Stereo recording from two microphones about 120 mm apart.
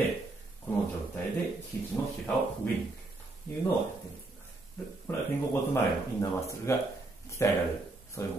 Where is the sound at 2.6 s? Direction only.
15° left (ahead or behind).